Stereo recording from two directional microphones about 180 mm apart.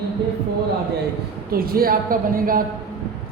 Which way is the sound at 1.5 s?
55° right (ahead or behind).